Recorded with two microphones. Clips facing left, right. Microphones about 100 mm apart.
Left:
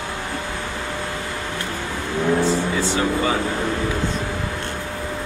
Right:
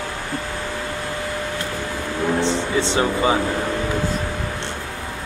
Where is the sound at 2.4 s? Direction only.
25° right (ahead or behind).